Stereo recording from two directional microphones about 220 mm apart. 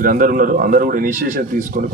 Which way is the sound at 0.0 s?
40° right (ahead or behind).